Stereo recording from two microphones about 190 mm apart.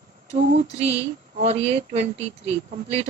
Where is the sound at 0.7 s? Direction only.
35° right (ahead or behind).